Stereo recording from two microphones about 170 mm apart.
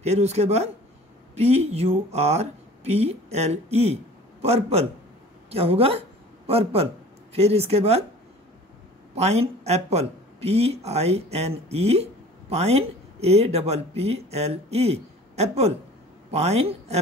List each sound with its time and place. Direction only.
0.0 s speech: 40° right (ahead or behind)
9.1 s speech: 40° right (ahead or behind)